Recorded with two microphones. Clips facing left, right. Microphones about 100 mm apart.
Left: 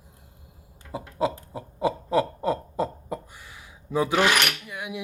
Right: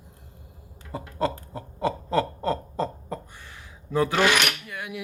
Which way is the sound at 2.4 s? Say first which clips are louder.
Left 1 dB; 10° left (ahead or behind).